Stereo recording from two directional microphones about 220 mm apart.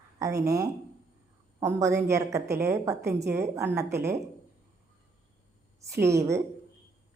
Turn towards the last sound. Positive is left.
turn(degrees=-15)  # may be behind; listen again after turning